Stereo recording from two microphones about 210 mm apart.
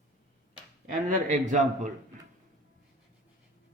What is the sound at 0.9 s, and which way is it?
A man's voice, 35° right (ahead or behind).